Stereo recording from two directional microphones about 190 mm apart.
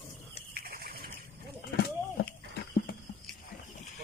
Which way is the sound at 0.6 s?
55° right (ahead or behind).